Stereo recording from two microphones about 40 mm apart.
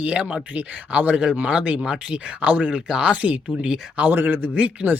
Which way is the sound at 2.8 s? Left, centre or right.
Right.